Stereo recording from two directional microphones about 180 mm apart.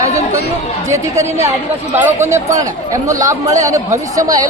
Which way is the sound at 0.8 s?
15° right (ahead or behind).